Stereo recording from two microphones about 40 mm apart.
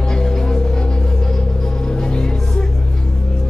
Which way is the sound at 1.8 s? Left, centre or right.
Centre.